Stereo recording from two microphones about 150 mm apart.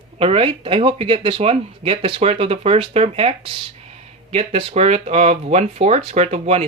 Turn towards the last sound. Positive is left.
turn(degrees=-45)  # may be behind; listen again after turning